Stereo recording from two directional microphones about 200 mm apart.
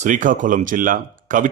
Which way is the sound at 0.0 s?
40° right (ahead or behind).